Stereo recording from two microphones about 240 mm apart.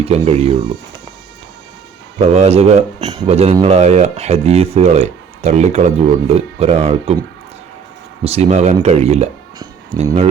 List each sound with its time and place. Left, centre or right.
0.0 s speech: right
2.2 s speech: right
8.2 s speech: right